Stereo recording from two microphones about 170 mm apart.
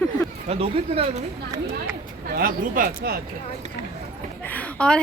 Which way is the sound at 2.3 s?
55° right (ahead or behind).